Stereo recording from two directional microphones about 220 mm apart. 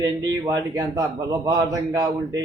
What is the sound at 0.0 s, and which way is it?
A man's voice, 15° right (ahead or behind).